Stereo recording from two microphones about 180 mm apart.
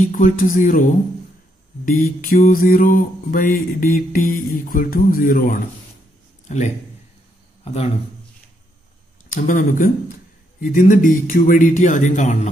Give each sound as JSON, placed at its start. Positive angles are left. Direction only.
{"t": 0.0, "sound": "mantra", "side_deg": 50}
{"t": 1.9, "sound": "mantra", "side_deg": 50}
{"t": 6.5, "sound": "a man's voice", "side_deg": 40}
{"t": 9.3, "sound": "mantra", "side_deg": 45}